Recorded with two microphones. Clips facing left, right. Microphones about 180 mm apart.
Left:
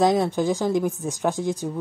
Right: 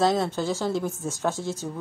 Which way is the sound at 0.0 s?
15° left (ahead or behind).